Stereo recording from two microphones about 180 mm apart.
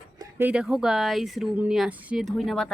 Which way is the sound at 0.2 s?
10° right (ahead or behind).